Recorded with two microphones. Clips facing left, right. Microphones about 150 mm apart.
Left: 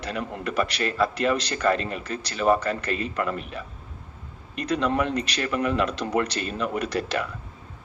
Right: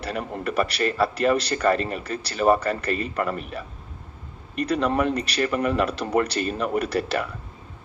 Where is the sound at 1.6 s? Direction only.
40° right (ahead or behind).